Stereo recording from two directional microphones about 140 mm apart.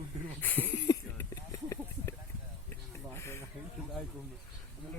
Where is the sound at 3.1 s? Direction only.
20° left (ahead or behind).